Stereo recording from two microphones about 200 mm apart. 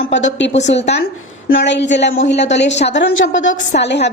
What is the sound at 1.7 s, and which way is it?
A woman's voice, 60° left (ahead or behind).